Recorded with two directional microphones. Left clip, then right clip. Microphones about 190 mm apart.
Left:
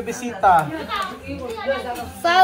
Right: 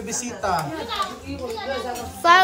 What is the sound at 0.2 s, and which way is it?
Speech, centre (ahead or behind).